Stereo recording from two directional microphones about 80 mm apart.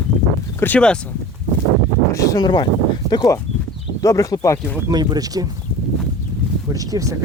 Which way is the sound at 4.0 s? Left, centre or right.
Left.